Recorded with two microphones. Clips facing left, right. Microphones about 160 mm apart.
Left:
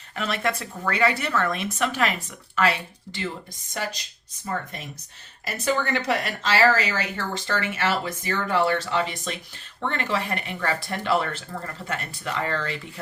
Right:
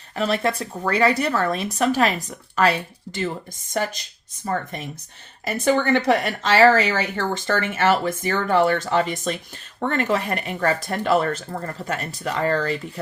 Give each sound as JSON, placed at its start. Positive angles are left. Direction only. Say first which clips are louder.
{"t": 0.2, "sound": "speech", "louder": "right 5 dB", "side_deg": -35}
{"t": 5.5, "sound": "speech", "louder": "right 6 dB", "side_deg": -50}